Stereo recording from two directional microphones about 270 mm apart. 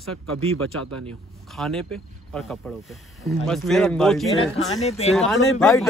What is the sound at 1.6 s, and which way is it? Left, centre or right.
Speech, centre.